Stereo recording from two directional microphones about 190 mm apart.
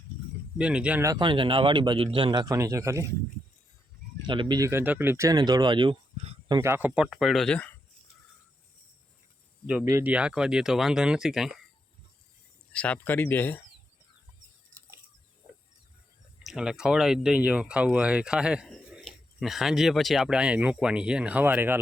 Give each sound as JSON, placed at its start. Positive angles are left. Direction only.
{"t": 0.6, "sound": "speech", "side_deg": -5}
{"t": 1.1, "sound": "a man's voice", "side_deg": -25}
{"t": 4.3, "sound": "speech", "side_deg": -25}
{"t": 9.8, "sound": "speech", "side_deg": -10}
{"t": 12.7, "sound": "speech", "side_deg": 5}
{"t": 16.4, "sound": "speech", "side_deg": 0}